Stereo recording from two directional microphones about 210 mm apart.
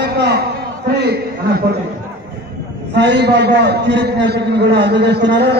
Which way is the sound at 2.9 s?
55° right (ahead or behind).